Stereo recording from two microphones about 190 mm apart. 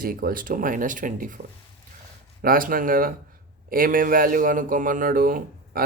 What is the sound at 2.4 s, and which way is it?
Speech, 50° right (ahead or behind).